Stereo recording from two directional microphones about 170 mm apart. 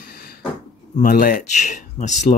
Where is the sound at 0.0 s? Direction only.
65° left (ahead or behind).